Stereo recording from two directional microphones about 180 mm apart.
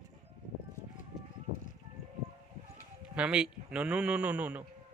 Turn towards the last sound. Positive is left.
turn(degrees=-5)  # may be behind; listen again after turning